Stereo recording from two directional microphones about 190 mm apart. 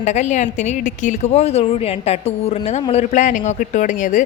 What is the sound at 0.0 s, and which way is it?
A woman's voice, 40° left (ahead or behind).